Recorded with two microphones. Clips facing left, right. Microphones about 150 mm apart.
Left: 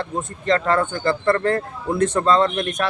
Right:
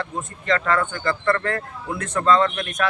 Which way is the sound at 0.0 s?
35° left (ahead or behind).